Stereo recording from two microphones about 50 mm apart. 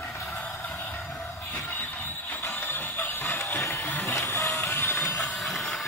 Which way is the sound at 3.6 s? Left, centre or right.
Left.